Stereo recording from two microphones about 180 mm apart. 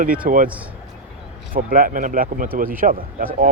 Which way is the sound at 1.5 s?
50° right (ahead or behind).